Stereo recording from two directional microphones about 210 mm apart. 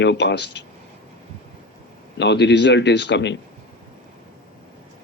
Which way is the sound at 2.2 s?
55° left (ahead or behind).